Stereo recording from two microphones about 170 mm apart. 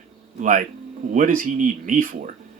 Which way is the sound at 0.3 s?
50° right (ahead or behind).